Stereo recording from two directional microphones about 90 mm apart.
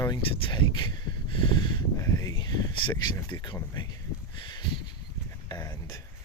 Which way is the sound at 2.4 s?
55° left (ahead or behind).